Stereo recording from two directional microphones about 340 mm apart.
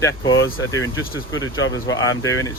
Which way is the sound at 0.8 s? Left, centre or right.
Left.